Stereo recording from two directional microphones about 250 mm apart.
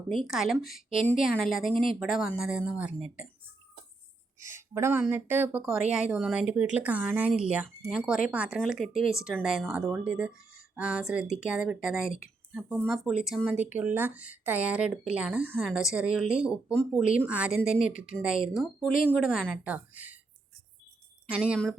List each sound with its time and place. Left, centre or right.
0.3 s speech: centre
1.1 s a woman's voice: left
1.5 s speech: centre
4.4 s speech: centre
21.2 s speech: centre